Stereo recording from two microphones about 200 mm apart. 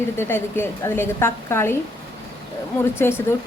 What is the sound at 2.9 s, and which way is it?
Speech, 10° left (ahead or behind).